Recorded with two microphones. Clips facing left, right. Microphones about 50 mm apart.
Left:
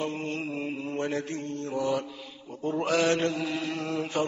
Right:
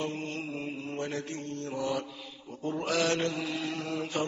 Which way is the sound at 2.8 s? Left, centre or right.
Centre.